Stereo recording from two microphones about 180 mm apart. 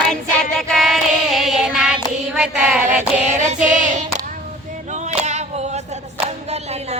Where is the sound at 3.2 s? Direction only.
40° right (ahead or behind).